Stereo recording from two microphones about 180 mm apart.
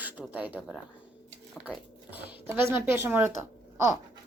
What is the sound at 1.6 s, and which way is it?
Speech, 10° right (ahead or behind).